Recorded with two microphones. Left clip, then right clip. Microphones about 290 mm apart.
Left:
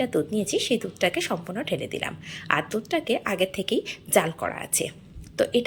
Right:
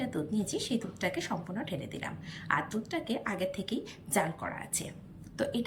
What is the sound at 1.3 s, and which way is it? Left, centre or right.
A woman's voice, centre.